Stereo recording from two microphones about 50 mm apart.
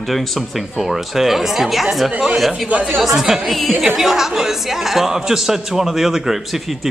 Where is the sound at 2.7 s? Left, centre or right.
Right.